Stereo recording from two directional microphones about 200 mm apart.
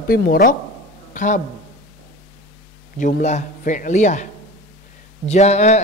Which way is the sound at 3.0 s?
40° left (ahead or behind).